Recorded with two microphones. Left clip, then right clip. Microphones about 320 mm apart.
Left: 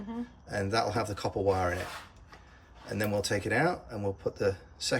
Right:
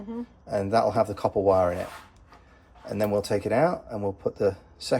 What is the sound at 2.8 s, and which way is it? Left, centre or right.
Speech, centre.